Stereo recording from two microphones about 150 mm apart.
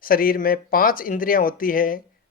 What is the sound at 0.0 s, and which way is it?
Speech, 75° left (ahead or behind).